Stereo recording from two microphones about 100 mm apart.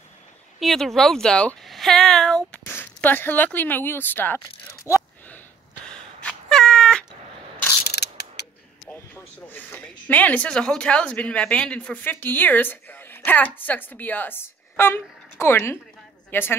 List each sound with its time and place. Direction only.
0.6 s speech: centre (ahead or behind)
2.6 s speech: 20° left (ahead or behind)
5.9 s cat: 10° left (ahead or behind)
8.8 s a woman's voice: 20° left (ahead or behind)